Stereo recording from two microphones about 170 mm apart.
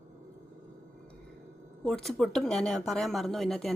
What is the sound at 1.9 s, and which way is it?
Speech, 5° left (ahead or behind).